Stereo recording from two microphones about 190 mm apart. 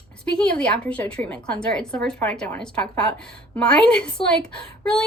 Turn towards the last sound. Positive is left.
turn(degrees=5)  # may be behind; listen again after turning